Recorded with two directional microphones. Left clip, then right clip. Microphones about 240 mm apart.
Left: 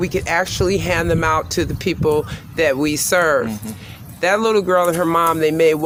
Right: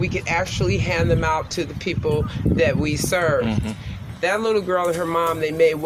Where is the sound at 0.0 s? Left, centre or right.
Left.